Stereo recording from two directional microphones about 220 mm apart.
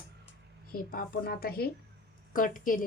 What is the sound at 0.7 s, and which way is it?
A woman's voice, 40° left (ahead or behind).